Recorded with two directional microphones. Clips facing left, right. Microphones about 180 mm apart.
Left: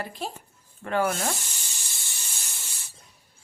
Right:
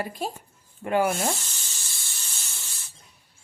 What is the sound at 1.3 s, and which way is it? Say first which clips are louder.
Spray: even; 15° left (ahead or behind).